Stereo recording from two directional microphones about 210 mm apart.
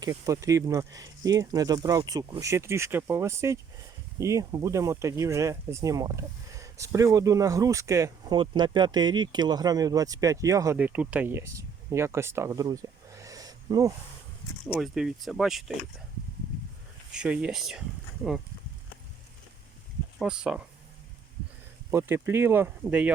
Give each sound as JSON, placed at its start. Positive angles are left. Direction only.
{"t": 0.0, "sound": "speech", "side_deg": -15}
{"t": 14.8, "sound": "speech", "side_deg": 0}
{"t": 17.1, "sound": "speech", "side_deg": -5}
{"t": 20.1, "sound": "speech", "side_deg": -5}
{"t": 21.8, "sound": "speech", "side_deg": -10}